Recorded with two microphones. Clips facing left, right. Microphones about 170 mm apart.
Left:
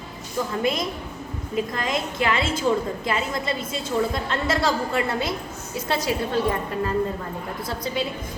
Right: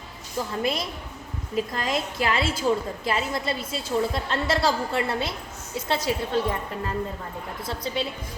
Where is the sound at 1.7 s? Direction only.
35° right (ahead or behind).